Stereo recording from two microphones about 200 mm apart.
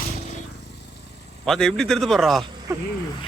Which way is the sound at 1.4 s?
Centre (ahead or behind).